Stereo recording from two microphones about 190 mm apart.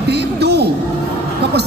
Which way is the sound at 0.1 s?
60° right (ahead or behind).